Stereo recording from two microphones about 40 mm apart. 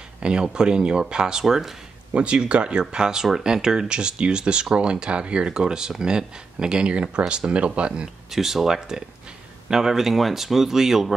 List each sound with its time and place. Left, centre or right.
0.2 s speech: right
1.4 s speech: centre
2.1 s speech: right
2.8 s speech: centre
5.5 s speech: centre
8.3 s speech: centre